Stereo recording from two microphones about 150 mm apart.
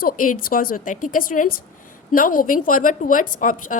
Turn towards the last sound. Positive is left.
turn(degrees=60)  # may be behind; listen again after turning